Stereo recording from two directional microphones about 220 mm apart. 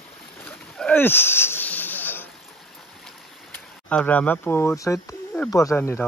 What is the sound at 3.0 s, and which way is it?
Speech, 5° left (ahead or behind).